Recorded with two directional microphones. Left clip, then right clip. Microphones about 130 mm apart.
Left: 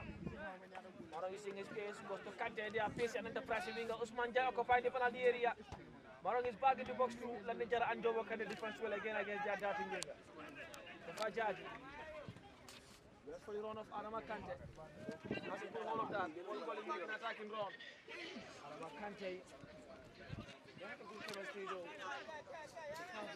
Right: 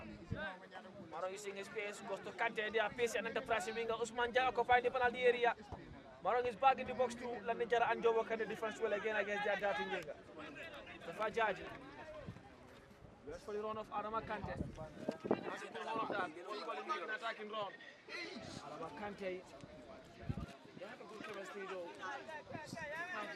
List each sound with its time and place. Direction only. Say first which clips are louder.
1.2 s a man's voice: right 2 dB; 45° right (ahead or behind)
3.6 s a man's voice: right 3 dB; 10° left (ahead or behind)
3.8 s a man's voice: right 3 dB; 45° right (ahead or behind)
9.7 s speech: right 3 dB; 25° right (ahead or behind)
11.2 s a man's voice: right 4 dB; 50° right (ahead or behind)
13.3 s a man's voice: right 3 dB; 40° right (ahead or behind)
18.8 s a man's voice: right 2 dB; 35° right (ahead or behind)
22.3 s speech: right 2 dB; 20° left (ahead or behind)